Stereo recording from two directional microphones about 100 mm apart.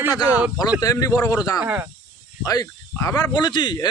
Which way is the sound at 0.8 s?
35° left (ahead or behind).